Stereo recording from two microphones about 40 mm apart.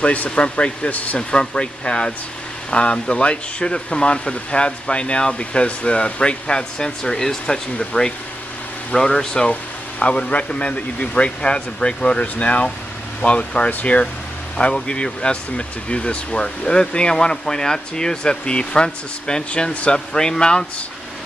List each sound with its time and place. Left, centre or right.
0.0 s speech: left
1.3 s speech: left
9.5 s speech: left
12.2 s speech: left
14.6 s speech: left
19.7 s speech: left
20.1 s speech: centre